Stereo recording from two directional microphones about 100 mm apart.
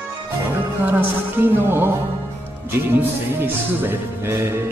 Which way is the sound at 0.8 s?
20° right (ahead or behind).